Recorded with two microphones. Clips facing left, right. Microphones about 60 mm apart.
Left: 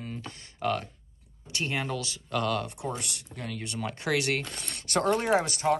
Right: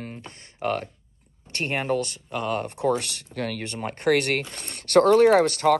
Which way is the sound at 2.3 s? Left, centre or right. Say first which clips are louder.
Right 1 dB; right.